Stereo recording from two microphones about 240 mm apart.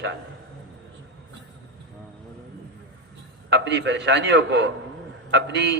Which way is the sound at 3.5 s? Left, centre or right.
Right.